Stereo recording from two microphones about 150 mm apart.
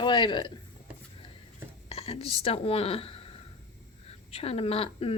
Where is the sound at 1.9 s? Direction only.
40° left (ahead or behind).